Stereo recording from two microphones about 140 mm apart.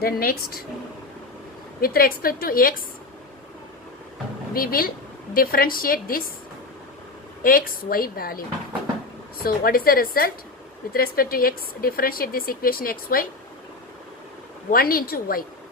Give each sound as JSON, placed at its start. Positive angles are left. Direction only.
{"t": 0.0, "sound": "speech", "side_deg": 90}
{"t": 1.8, "sound": "speech", "side_deg": 90}
{"t": 4.5, "sound": "speech", "side_deg": 90}
{"t": 7.4, "sound": "speech", "side_deg": 90}
{"t": 14.7, "sound": "speech", "side_deg": 90}